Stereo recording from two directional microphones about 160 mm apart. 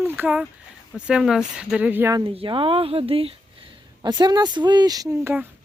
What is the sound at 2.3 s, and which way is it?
Speech, 30° right (ahead or behind).